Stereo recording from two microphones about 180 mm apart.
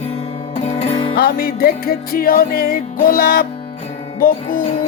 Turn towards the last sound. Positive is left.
turn(degrees=50)  # may be behind; listen again after turning